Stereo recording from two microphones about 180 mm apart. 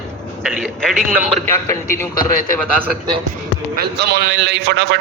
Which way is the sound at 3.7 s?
60° right (ahead or behind).